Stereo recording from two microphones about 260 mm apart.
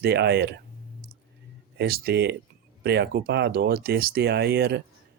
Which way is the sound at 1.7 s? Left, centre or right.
Right.